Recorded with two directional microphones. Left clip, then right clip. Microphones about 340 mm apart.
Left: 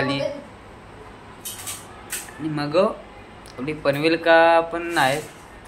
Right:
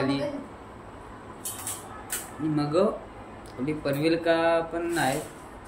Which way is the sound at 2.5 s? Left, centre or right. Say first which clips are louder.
Left 4 dB; centre.